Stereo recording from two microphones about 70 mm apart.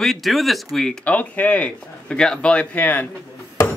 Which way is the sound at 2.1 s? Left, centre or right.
Centre.